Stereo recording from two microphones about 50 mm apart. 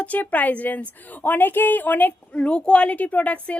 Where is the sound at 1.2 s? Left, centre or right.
Left.